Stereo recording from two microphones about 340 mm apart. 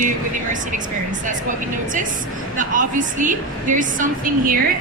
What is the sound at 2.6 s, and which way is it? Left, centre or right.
A woman's voice, right.